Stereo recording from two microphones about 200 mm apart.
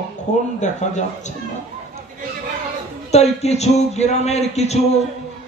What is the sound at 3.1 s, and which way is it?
Speech, 35° left (ahead or behind).